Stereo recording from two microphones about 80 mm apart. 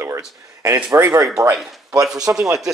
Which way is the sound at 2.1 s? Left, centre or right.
Right.